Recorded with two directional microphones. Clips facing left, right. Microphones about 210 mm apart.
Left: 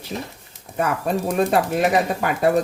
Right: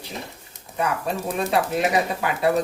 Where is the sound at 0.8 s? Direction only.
50° left (ahead or behind).